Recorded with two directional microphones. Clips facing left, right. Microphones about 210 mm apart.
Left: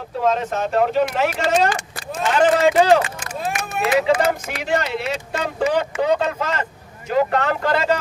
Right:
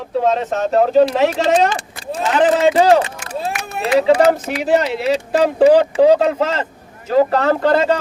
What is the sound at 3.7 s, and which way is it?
Speech, 35° right (ahead or behind).